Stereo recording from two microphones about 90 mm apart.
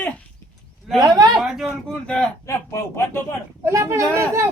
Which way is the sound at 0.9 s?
45° right (ahead or behind).